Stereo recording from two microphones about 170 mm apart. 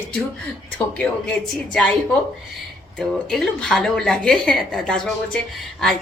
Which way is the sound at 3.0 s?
5° left (ahead or behind).